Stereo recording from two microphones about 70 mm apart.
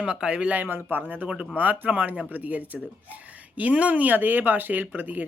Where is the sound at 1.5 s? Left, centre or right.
Right.